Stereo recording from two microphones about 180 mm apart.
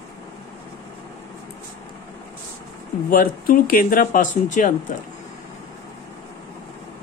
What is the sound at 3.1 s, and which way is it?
Speech, 50° left (ahead or behind).